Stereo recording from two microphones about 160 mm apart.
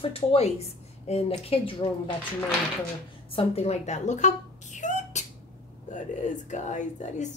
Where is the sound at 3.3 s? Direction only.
40° left (ahead or behind).